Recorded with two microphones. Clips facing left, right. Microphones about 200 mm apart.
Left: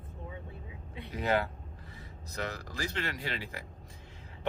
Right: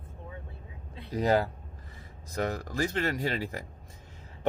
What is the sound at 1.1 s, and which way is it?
Speech, 40° right (ahead or behind).